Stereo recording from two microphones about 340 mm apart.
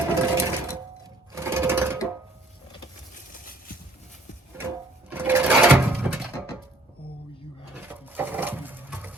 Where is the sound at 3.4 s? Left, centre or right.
Left.